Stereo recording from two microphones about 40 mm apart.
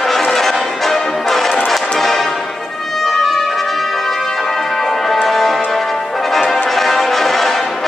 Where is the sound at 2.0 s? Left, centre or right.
Centre.